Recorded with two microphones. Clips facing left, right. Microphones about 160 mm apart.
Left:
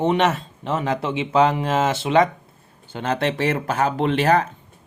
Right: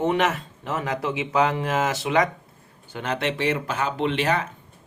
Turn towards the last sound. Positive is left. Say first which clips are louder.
# left 5 dB
turn(degrees=40)  # may be behind; listen again after turning